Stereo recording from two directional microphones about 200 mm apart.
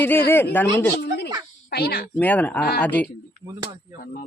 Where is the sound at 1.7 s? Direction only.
50° left (ahead or behind).